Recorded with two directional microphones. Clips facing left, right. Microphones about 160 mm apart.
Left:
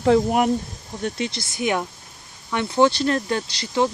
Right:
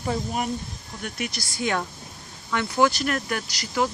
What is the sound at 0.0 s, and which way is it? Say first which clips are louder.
Speech: left 10 dB; 70° left (ahead or behind).